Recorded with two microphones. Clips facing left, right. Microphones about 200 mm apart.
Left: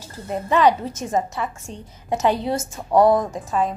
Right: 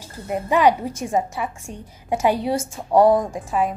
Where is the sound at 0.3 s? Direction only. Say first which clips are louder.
Even; 10° right (ahead or behind).